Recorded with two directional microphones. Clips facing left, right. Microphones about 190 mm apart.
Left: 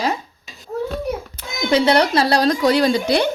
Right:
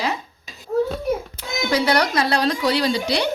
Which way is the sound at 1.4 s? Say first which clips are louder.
Right 1 dB; 55° left (ahead or behind).